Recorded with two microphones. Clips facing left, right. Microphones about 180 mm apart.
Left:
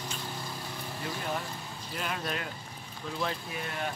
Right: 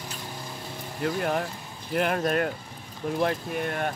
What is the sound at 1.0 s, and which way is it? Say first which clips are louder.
Speech: right 9 dB; 60° right (ahead or behind).